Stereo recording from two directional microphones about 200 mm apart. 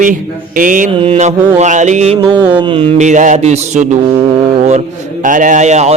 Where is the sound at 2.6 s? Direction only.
25° right (ahead or behind).